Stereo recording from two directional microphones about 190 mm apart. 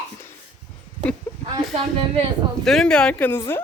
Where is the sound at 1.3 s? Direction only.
10° left (ahead or behind).